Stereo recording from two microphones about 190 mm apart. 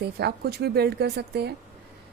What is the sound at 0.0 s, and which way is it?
Speech, 55° right (ahead or behind).